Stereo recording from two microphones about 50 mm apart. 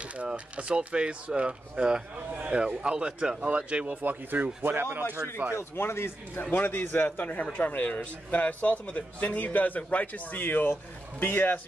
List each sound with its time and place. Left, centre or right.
0.6 s speech: right
4.0 s speech: right
5.5 s a man's voice: left
6.4 s speech: left
7.4 s speech: left
10.4 s speech: left